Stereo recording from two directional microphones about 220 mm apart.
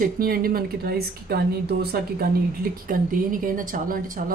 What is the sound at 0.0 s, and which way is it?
A woman's voice, 40° right (ahead or behind).